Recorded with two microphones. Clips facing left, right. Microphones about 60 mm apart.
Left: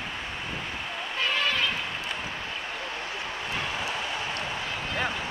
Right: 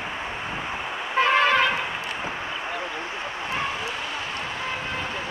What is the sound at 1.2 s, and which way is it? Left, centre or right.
Vehicle, right.